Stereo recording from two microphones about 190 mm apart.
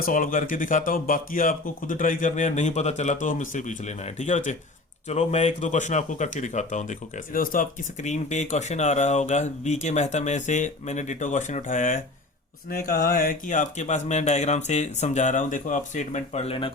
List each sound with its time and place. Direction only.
0.0 s speech: 45° left (ahead or behind)
12.7 s speech: 55° left (ahead or behind); by 16.7 s 30° left (ahead or behind)